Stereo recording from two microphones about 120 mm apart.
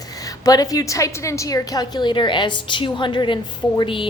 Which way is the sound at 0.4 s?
30° left (ahead or behind).